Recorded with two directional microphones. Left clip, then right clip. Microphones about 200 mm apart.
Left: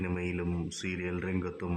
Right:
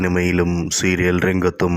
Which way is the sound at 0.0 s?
35° right (ahead or behind).